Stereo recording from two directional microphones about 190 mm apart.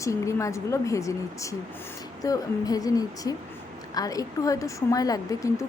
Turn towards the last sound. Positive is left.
turn(degrees=15)  # may be behind; listen again after turning